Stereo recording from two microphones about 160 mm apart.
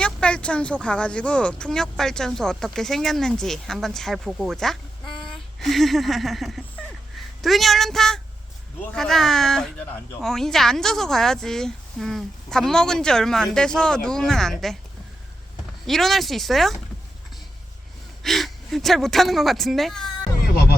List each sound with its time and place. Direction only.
0.0 s speech: 5° left (ahead or behind)
5.0 s a sound: 30° left (ahead or behind)
5.3 s speech: centre (ahead or behind)
15.9 s speech: centre (ahead or behind)
18.2 s speech: centre (ahead or behind)